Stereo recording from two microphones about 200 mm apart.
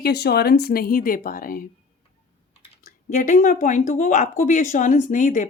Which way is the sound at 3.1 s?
40° left (ahead or behind).